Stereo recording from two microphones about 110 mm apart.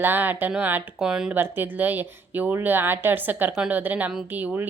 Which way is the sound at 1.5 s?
15° right (ahead or behind).